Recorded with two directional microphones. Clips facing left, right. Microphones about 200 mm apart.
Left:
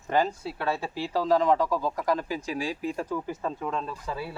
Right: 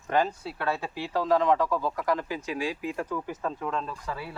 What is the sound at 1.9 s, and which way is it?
Speech, 35° left (ahead or behind).